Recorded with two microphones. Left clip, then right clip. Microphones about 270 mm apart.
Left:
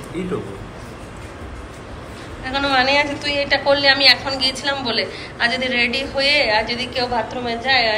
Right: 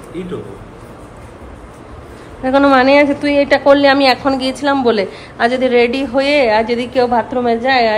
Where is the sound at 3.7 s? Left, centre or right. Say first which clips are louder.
Right 3 dB; centre.